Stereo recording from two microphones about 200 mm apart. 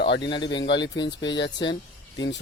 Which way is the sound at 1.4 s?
65° left (ahead or behind).